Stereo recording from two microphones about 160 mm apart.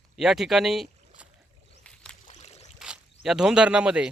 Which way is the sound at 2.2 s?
45° left (ahead or behind).